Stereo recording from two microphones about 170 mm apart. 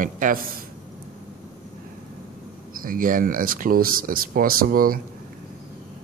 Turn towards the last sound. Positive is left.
turn(degrees=-55)  # may be behind; listen again after turning